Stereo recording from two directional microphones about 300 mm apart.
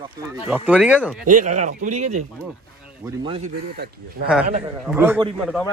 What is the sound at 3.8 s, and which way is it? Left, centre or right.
Speech, right.